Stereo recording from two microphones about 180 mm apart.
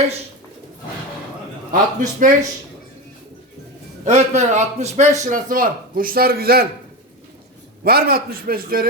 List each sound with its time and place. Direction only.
1.7 s a man's voice: 45° right (ahead or behind)
4.0 s a man's voice: 40° right (ahead or behind); by 6.7 s 55° right (ahead or behind)
7.9 s a man's voice: 60° right (ahead or behind)